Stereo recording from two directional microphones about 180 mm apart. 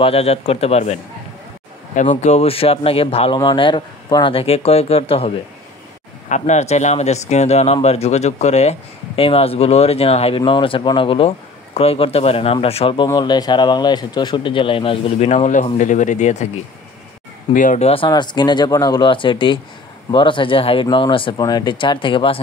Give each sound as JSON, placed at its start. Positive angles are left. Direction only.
{"t": 0.0, "sound": "speech", "side_deg": 35}
{"t": 2.0, "sound": "speech", "side_deg": 40}
{"t": 17.6, "sound": "speech", "side_deg": 40}